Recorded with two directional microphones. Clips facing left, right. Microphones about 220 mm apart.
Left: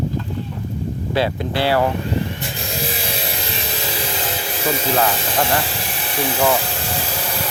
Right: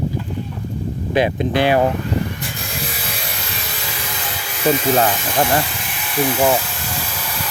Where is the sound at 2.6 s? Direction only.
25° left (ahead or behind).